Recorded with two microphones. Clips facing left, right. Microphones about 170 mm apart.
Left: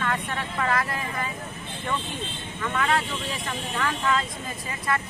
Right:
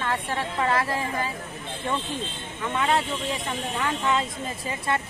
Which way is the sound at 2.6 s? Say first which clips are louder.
Right 1 dB; 25° right (ahead or behind).